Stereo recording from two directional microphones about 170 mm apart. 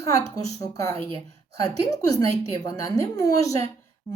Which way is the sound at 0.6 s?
20° left (ahead or behind).